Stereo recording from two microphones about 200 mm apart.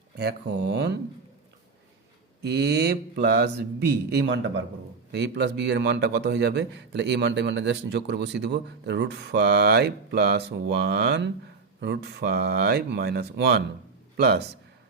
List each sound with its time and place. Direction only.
0.2 s a man's voice: 55° right (ahead or behind)
2.4 s a man's voice: 55° right (ahead or behind)